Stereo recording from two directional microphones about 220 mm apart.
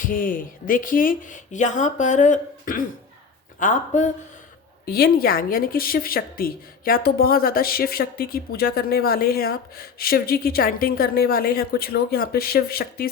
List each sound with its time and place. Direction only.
0.0 s a woman's voice: 40° left (ahead or behind)